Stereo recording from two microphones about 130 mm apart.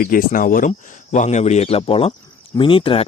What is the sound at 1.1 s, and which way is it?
Speech, 65° left (ahead or behind).